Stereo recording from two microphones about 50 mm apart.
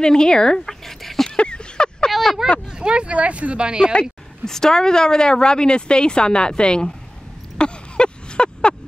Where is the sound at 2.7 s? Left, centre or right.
Centre.